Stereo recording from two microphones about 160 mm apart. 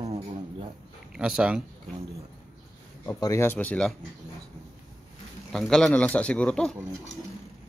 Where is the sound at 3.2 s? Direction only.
20° left (ahead or behind).